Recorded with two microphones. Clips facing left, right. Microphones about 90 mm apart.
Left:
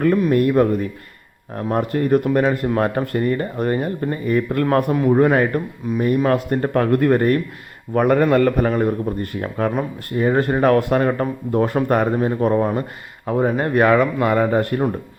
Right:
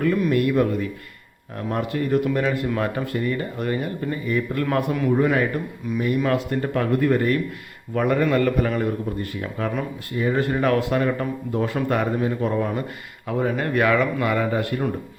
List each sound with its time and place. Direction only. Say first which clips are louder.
0.0 s a man's voice: left 4 dB; 40° left (ahead or behind)
5.1 s a man's voice: left 5 dB; 50° left (ahead or behind)